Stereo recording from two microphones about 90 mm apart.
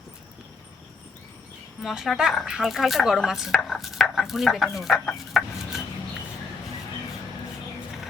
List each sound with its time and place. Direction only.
1.8 s speech: centre (ahead or behind)
3.5 s chopping: 5° left (ahead or behind)
4.0 s speech: centre (ahead or behind)